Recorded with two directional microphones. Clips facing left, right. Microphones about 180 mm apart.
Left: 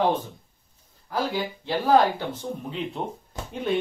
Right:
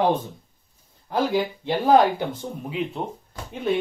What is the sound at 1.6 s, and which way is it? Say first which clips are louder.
Speech: right 2 dB; 20° right (ahead or behind).